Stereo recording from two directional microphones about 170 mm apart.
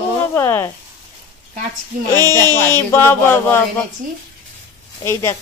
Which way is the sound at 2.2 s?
20° right (ahead or behind).